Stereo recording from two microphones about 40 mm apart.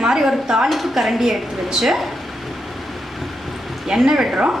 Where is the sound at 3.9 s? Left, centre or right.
Centre.